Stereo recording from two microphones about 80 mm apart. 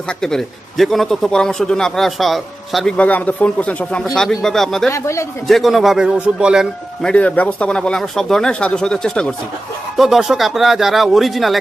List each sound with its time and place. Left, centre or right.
0.1 s a man's voice: centre
3.0 s speech: centre
4.0 s a man's voice: centre
4.9 s speech: left
5.5 s a man's voice: centre
7.0 s speech: centre
10.0 s a man's voice: centre